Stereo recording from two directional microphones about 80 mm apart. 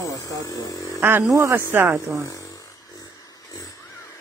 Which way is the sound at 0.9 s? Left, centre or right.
Right.